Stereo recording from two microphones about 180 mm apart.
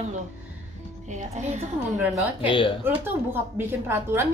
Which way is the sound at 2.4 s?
30° left (ahead or behind).